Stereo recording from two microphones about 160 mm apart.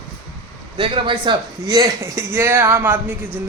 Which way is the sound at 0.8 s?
30° right (ahead or behind).